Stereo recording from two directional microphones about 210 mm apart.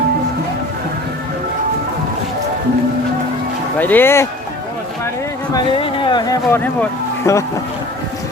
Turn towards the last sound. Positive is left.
turn(degrees=15)  # may be behind; listen again after turning